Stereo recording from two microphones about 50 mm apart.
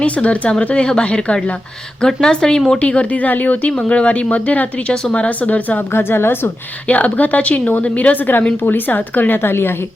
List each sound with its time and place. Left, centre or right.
0.0 s speech: left
5.9 s a woman's voice: left
6.8 s speech: left
9.4 s a woman's voice: left